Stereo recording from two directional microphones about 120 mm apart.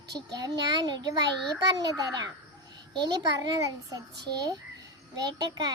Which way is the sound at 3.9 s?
35° right (ahead or behind).